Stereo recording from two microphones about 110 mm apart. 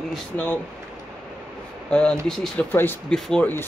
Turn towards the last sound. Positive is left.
turn(degrees=5)  # may be behind; listen again after turning